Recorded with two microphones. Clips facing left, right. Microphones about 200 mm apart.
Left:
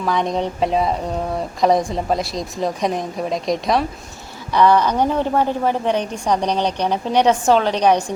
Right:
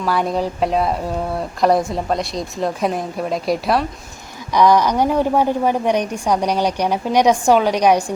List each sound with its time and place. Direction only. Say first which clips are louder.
0.0 s a woman's voice: right 1 dB; 5° right (ahead or behind)